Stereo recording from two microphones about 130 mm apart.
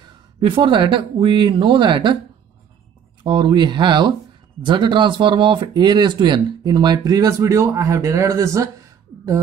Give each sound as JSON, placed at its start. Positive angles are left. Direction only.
{"t": 0.0, "sound": "speech", "side_deg": -40}
{"t": 3.3, "sound": "speech", "side_deg": -35}